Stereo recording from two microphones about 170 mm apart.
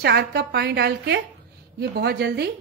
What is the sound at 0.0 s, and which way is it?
A woman's voice, 75° right (ahead or behind).